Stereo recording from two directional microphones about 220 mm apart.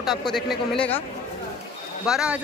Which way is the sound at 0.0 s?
Centre (ahead or behind).